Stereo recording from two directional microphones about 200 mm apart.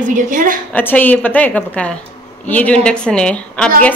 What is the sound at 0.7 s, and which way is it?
A woman's voice, 10° left (ahead or behind).